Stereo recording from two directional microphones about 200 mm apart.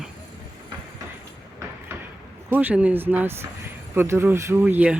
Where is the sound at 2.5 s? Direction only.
10° right (ahead or behind).